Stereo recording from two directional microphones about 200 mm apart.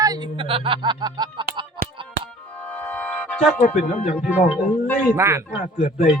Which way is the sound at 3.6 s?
35° left (ahead or behind).